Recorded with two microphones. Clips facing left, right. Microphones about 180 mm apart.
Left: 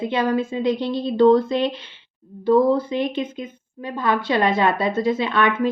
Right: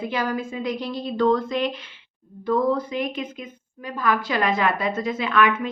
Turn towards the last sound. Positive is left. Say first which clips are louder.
# left 1 dB
turn(degrees=30)  # may be behind; listen again after turning